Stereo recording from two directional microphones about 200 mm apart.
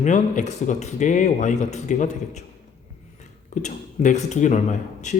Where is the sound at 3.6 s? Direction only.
35° left (ahead or behind).